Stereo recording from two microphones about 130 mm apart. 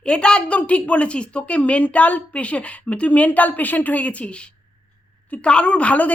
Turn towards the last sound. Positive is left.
turn(degrees=10)  # may be behind; listen again after turning